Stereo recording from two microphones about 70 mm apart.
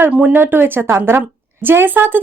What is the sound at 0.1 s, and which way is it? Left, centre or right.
Speech, centre.